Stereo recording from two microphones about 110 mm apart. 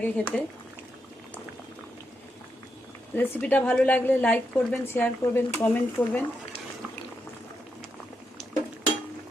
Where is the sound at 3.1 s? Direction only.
15° left (ahead or behind).